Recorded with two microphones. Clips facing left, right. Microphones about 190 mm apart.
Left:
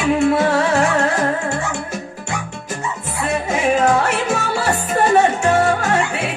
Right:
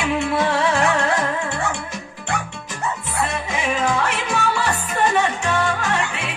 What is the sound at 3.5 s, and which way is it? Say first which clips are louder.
Music: left 9 dB; 45° left (ahead or behind).